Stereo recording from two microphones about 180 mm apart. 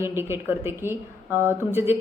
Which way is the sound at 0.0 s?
15° right (ahead or behind).